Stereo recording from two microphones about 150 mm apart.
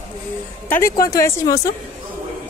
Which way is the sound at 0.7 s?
20° left (ahead or behind).